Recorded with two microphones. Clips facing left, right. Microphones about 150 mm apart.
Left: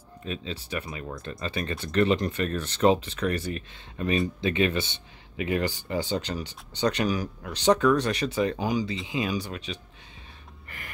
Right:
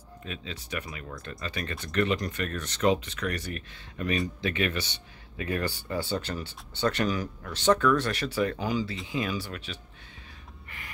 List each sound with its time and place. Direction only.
0.2 s speech: 30° left (ahead or behind)